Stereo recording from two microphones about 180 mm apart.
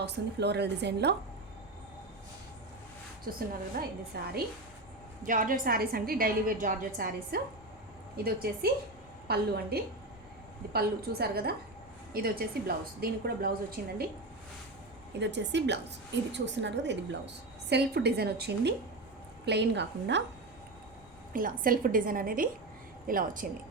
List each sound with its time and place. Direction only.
0.0 s a woman's voice: 70° right (ahead or behind)
3.2 s a woman's voice: 55° right (ahead or behind)
5.2 s a woman's voice: 45° right (ahead or behind)
15.2 s a woman's voice: 80° right
21.3 s a woman's voice: 50° right (ahead or behind)